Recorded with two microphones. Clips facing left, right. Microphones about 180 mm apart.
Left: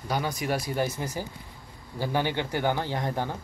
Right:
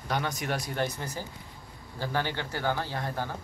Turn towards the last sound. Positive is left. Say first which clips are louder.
# left 4 dB
turn(degrees=20)  # may be behind; listen again after turning